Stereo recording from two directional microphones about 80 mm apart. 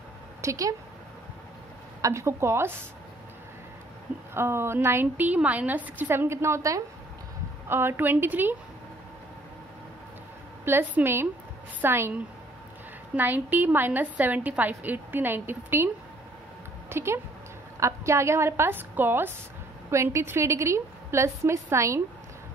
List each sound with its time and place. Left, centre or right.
0.4 s a woman's voice: right
2.0 s a woman's voice: right
4.3 s a woman's voice: right
10.6 s a woman's voice: right
16.9 s a woman's voice: right